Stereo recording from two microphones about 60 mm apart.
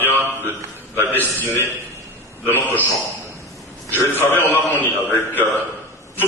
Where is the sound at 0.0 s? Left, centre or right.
Right.